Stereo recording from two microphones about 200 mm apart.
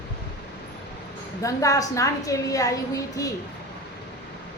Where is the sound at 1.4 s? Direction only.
15° left (ahead or behind).